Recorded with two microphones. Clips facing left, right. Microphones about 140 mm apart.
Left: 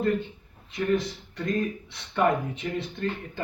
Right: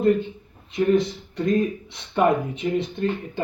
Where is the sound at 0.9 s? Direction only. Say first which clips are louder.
Right 5 dB; 20° right (ahead or behind).